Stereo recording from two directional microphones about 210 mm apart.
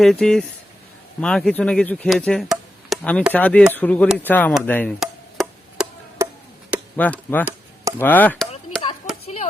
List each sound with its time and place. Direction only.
0.0 s speech: centre (ahead or behind)
4.6 s chop: 10° left (ahead or behind)
6.9 s speech: 5° left (ahead or behind)
7.9 s chop: 10° left (ahead or behind)
9.2 s chop: 30° left (ahead or behind)